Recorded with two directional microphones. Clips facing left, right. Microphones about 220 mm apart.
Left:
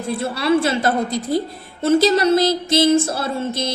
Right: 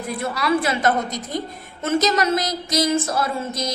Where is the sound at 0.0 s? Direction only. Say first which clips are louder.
Left 3 dB; 30° left (ahead or behind).